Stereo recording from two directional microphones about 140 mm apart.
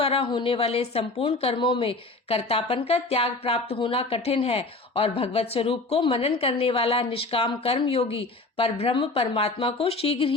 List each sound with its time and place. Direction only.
0.0 s speech: 45° left (ahead or behind)